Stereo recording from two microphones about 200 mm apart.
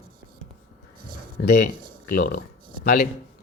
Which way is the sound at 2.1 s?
45° left (ahead or behind).